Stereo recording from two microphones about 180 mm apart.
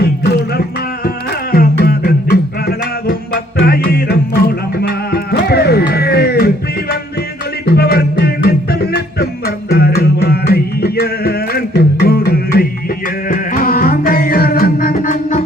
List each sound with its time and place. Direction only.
1.5 s music: 55° left (ahead or behind)
7.7 s music: 60° left (ahead or behind)
14.9 s music: 45° left (ahead or behind)